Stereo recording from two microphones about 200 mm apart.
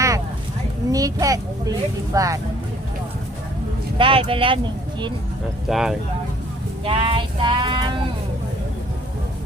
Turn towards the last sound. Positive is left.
turn(degrees=-25)  # may be behind; listen again after turning